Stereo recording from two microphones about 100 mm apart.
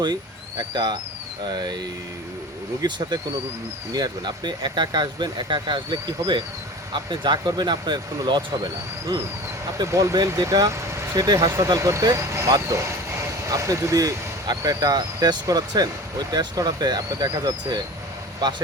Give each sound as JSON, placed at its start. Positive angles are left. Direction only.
{"t": 0.6, "sound": "speech", "side_deg": -45}
{"t": 9.7, "sound": "speech", "side_deg": -35}